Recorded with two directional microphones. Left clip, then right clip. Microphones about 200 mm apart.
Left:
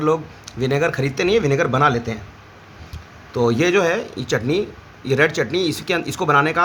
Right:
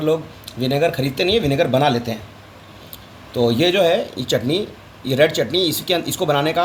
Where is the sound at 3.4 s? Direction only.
30° left (ahead or behind).